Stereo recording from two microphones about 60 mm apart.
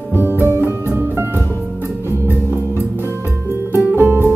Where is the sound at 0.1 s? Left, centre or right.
Right.